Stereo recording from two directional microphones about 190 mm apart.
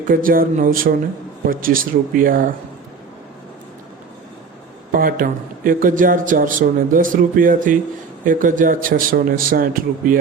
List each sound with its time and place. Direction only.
0.1 s a man's voice: 45° right (ahead or behind)
4.9 s a man's voice: 45° right (ahead or behind)